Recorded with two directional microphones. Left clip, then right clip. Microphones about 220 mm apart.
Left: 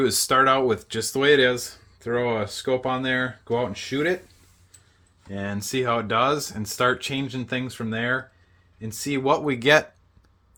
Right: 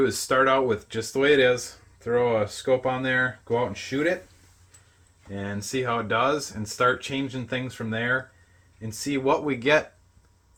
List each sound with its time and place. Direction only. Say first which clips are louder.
0.0 s speech: left 2 dB; 35° left (ahead or behind)
5.3 s speech: left 2 dB; 40° left (ahead or behind)